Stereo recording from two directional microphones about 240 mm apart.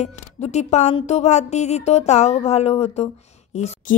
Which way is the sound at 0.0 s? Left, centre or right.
Left.